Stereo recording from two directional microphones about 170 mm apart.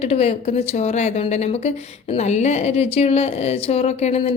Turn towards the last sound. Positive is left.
turn(degrees=40)  # may be behind; listen again after turning